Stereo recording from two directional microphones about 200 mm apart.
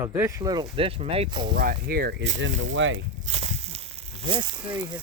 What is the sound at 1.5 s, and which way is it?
Speech, 50° right (ahead or behind).